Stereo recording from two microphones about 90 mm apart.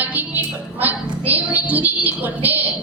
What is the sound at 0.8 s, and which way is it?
A woman's voice, 20° right (ahead or behind).